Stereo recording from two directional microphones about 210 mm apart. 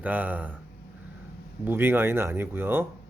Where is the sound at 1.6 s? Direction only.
10° right (ahead or behind).